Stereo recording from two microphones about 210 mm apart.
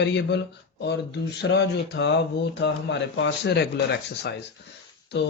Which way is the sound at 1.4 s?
55° left (ahead or behind).